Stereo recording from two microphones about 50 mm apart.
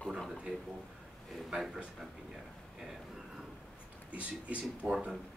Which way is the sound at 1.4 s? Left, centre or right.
Centre.